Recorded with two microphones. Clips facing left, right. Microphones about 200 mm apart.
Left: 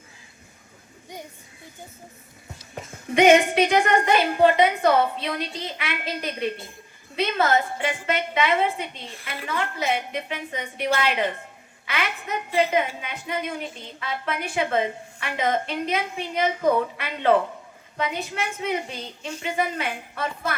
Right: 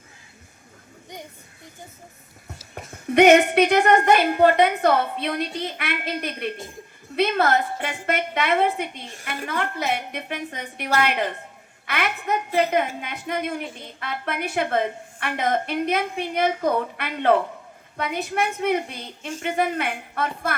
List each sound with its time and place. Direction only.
2.7 s a woman's voice: 55° right (ahead or behind)